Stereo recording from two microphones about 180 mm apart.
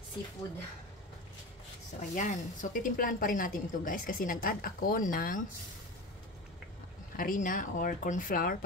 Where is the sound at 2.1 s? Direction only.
45° left (ahead or behind).